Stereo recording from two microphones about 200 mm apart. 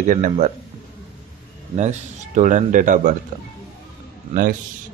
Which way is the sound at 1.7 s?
35° right (ahead or behind).